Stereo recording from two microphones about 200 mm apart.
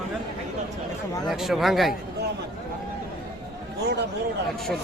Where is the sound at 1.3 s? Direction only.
Centre (ahead or behind).